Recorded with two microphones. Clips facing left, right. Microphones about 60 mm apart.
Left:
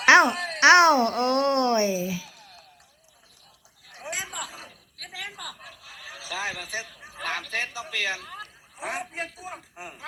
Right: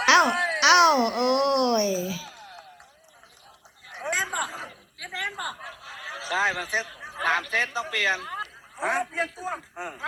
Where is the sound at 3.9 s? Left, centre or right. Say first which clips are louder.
Right 7 dB; right.